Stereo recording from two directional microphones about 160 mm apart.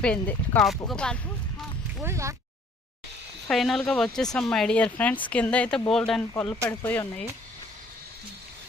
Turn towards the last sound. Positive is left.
turn(degrees=15)  # may be behind; listen again after turning